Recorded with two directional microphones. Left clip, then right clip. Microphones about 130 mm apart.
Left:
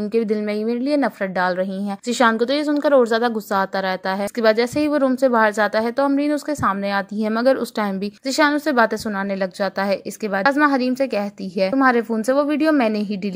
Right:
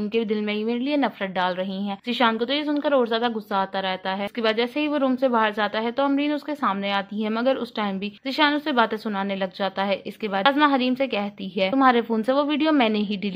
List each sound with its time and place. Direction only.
0.1 s a woman's voice: 40° left (ahead or behind)
10.4 s a woman's voice: 5° left (ahead or behind)
11.8 s speech: 5° left (ahead or behind)